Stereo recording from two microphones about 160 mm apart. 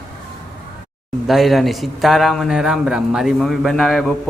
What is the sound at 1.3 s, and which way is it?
A man's voice, centre (ahead or behind).